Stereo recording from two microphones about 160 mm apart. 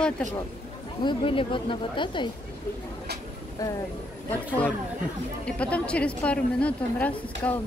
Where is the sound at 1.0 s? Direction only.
35° left (ahead or behind).